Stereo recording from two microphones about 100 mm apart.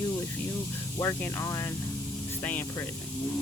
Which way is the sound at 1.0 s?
25° left (ahead or behind).